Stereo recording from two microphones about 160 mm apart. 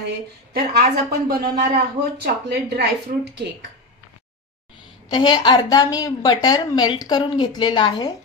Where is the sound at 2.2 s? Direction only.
90° right.